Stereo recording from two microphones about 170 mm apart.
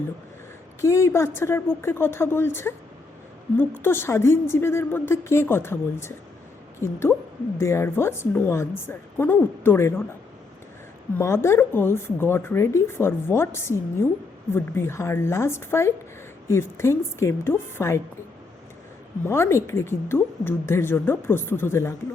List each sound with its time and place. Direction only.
0.8 s speech: 15° left (ahead or behind)
11.2 s speech: 15° left (ahead or behind)
19.2 s speech: 15° left (ahead or behind)